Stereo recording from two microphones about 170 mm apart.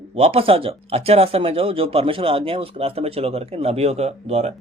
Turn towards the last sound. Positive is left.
turn(degrees=-40)  # may be behind; listen again after turning